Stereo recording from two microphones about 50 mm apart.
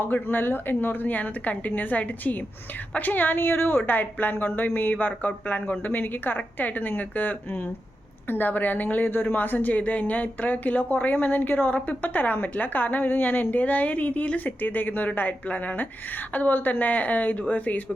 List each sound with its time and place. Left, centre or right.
0.0 s speech: left